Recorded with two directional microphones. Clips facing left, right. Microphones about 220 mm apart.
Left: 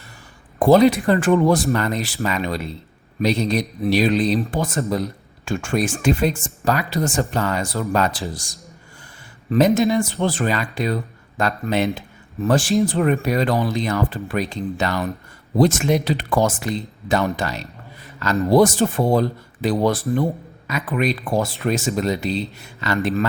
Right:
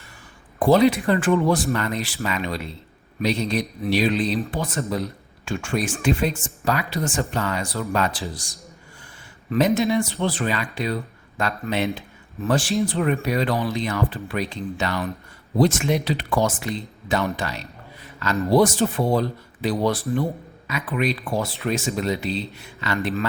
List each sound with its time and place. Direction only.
0.6 s speech: 45° left (ahead or behind)
9.5 s speech: 40° left (ahead or behind)